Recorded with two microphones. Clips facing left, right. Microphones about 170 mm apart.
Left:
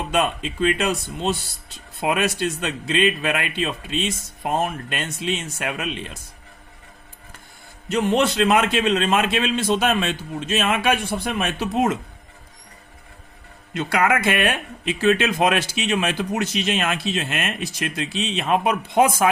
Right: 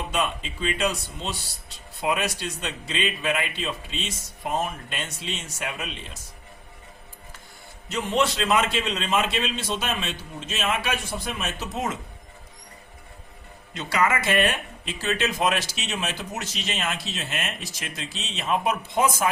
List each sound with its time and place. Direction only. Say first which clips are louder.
0.1 s speech: left 7 dB; 65° left (ahead or behind)
7.9 s speech: left 5 dB; 60° left (ahead or behind)
13.7 s speech: left 4 dB; 55° left (ahead or behind)